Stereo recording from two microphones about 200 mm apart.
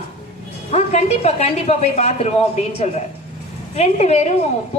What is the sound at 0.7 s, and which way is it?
A man's voice, 30° left (ahead or behind).